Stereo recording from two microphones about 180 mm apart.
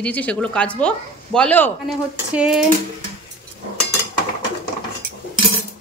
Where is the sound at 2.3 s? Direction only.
5° right (ahead or behind).